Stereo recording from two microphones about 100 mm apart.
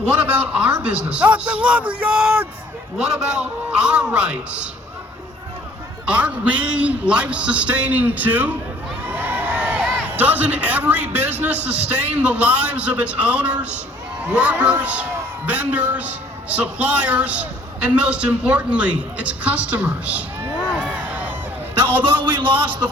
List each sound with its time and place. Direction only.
0.0 s a man's voice: 15° right (ahead or behind)
6.1 s a man's voice: 15° right (ahead or behind)
9.0 s crowd: 15° right (ahead or behind)
10.1 s a man's voice: 15° right (ahead or behind)
20.7 s a sound: 15° right (ahead or behind)
22.6 s a man's voice: 50° right (ahead or behind)